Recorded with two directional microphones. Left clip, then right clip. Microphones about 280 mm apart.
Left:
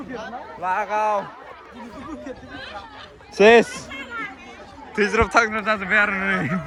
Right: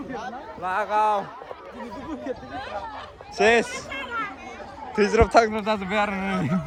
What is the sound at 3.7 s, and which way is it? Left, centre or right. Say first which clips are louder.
Children playing: right 2 dB; centre.